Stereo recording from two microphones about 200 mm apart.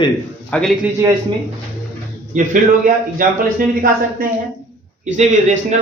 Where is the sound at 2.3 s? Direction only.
40° right (ahead or behind).